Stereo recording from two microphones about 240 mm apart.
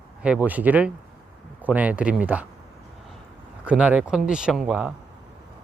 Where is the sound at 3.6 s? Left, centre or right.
Centre.